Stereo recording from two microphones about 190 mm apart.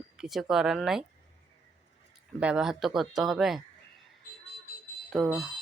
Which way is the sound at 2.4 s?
5° right (ahead or behind).